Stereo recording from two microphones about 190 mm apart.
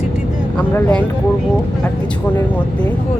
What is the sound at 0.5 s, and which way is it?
Speech, 5° left (ahead or behind).